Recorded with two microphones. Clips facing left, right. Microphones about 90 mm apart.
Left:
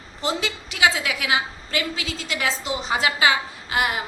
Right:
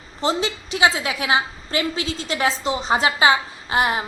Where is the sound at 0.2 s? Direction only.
25° right (ahead or behind).